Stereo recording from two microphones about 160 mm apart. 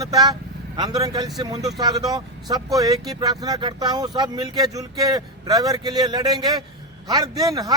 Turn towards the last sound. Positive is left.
turn(degrees=-25)  # may be behind; listen again after turning